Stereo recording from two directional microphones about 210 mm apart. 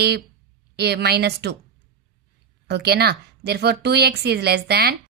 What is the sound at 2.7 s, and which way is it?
A woman's voice, 50° right (ahead or behind).